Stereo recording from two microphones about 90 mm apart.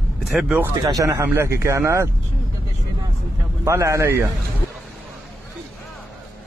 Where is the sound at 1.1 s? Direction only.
30° right (ahead or behind).